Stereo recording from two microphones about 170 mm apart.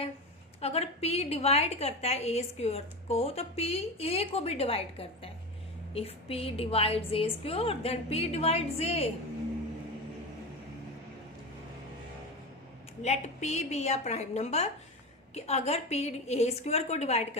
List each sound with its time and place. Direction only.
0.6 s a woman's voice: 35° left (ahead or behind)
13.0 s a woman's voice: 40° left (ahead or behind)